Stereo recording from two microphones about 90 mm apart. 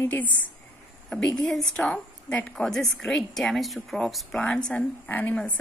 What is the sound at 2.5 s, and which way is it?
A woman's voice, 5° left (ahead or behind).